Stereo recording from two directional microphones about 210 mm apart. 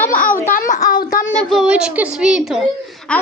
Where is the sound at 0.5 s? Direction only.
40° left (ahead or behind).